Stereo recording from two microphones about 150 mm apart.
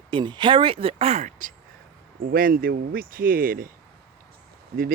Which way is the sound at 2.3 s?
75° right (ahead or behind).